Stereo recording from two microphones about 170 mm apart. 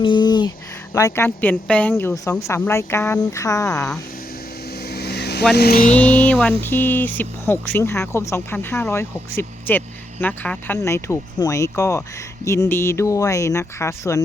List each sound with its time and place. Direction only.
0.0 s a sound: 25° left (ahead or behind)
0.9 s speech: 15° left (ahead or behind)
4.8 s vehicle: 70° left (ahead or behind)
6.2 s speech: 10° left (ahead or behind)